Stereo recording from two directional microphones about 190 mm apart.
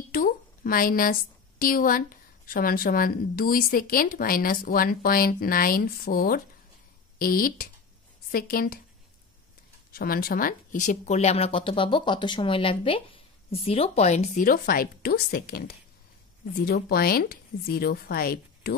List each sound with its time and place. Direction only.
0.1 s a sound: 50° left (ahead or behind)
1.6 s a woman's voice: 50° left (ahead or behind)
9.9 s a woman's voice: 50° left (ahead or behind)